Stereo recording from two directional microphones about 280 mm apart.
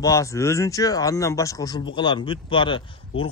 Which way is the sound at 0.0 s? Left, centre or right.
Centre.